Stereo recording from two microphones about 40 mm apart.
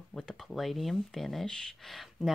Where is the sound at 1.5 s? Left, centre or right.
Centre.